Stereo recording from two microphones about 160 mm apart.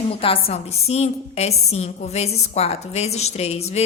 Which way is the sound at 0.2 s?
35° left (ahead or behind).